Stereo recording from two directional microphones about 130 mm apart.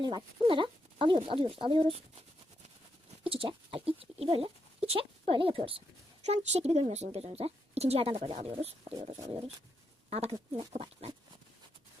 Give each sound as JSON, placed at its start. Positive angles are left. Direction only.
{"t": 0.0, "sound": "speech", "side_deg": -40}
{"t": 3.2, "sound": "speech", "side_deg": -45}
{"t": 6.2, "sound": "speech", "side_deg": -60}
{"t": 9.0, "sound": "a sound", "side_deg": -25}
{"t": 10.1, "sound": "speech", "side_deg": -50}
{"t": 10.3, "sound": "a sound", "side_deg": -30}
{"t": 10.7, "sound": "speech", "side_deg": -55}